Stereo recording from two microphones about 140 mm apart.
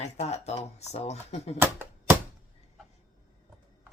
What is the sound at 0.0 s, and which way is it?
Speech, 50° left (ahead or behind).